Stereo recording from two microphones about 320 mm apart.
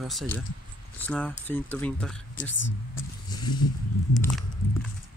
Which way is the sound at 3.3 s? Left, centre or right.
Centre.